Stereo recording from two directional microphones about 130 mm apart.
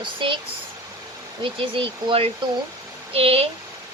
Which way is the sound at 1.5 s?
45° right (ahead or behind).